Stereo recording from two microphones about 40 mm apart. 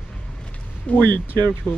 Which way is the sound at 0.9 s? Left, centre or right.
Left.